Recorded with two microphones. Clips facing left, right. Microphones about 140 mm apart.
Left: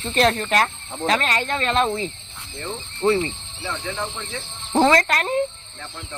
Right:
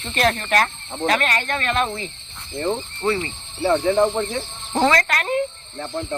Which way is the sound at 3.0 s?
10° left (ahead or behind).